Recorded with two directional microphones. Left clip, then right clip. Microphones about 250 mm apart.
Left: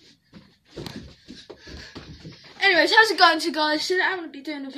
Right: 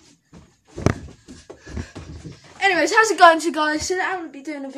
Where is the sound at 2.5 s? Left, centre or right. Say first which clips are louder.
Even; centre.